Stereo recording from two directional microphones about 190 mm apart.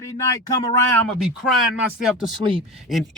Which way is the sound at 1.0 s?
Centre (ahead or behind).